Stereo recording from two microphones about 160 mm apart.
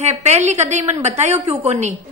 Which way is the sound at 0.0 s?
45° right (ahead or behind).